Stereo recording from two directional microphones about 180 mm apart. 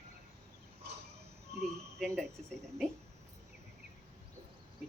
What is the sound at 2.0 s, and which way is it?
Speech, centre (ahead or behind).